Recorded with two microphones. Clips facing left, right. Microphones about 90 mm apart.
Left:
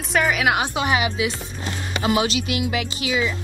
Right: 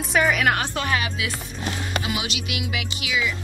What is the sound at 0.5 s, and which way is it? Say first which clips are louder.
Speech: left 3 dB; 15° left (ahead or behind).